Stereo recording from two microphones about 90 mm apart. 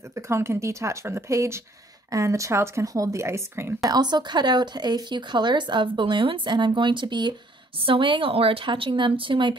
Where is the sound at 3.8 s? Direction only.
50° right (ahead or behind).